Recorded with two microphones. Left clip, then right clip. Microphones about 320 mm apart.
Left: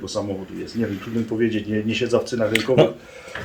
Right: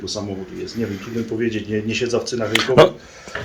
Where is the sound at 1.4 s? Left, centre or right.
Centre.